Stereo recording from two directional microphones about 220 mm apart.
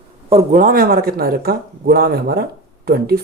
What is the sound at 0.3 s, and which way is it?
Speech, 30° right (ahead or behind).